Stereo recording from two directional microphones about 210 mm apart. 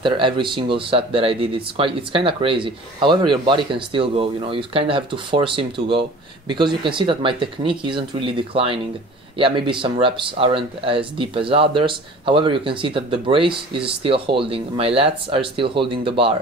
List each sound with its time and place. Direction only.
0.0 s speech: 25° right (ahead or behind)